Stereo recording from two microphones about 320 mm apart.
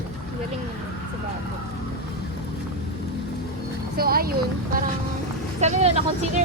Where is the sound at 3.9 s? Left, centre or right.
Right.